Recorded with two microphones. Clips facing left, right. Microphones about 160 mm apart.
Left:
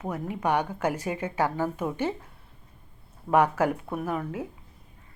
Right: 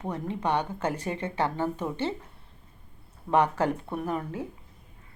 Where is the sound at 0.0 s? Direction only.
10° left (ahead or behind).